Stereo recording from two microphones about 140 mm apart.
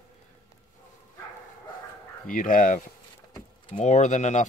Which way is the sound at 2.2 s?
75° left (ahead or behind).